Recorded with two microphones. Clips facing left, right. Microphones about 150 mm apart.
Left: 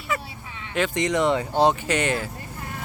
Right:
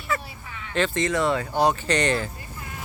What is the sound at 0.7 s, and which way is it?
Speech, 15° left (ahead or behind).